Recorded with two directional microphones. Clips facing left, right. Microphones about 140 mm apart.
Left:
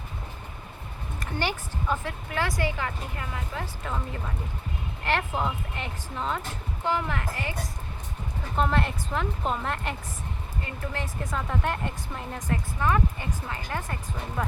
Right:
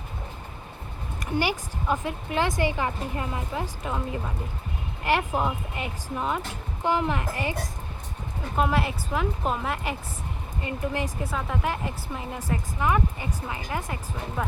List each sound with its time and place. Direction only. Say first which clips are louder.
1.2 s a woman's voice: right 4 dB; 10° right (ahead or behind)
8.5 s a woman's voice: right 1 dB; 5° right (ahead or behind)
10.6 s speech: right 6 dB; 15° right (ahead or behind)